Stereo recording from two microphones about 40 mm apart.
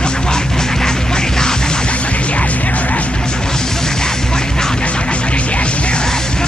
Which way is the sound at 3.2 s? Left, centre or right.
Centre.